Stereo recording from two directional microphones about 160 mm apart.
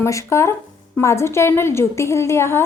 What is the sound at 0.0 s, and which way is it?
A woman's voice, 15° left (ahead or behind).